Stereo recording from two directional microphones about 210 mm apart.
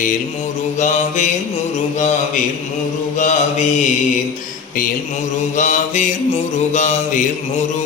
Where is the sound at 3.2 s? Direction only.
35° left (ahead or behind).